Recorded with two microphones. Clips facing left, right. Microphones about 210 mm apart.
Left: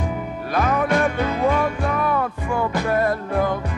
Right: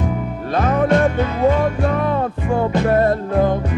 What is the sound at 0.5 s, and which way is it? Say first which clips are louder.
Music: right 4 dB; 25° right (ahead or behind).